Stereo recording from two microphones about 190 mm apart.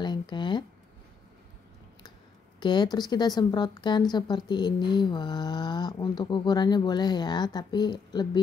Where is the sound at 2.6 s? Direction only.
25° left (ahead or behind).